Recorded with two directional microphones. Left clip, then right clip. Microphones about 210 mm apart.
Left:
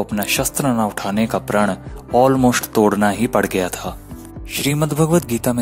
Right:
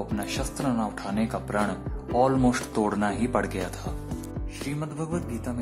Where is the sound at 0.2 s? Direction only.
35° left (ahead or behind).